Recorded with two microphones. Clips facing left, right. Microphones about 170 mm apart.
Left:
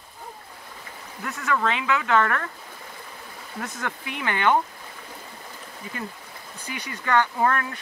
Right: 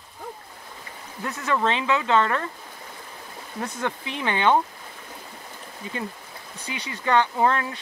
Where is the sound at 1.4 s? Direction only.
25° right (ahead or behind).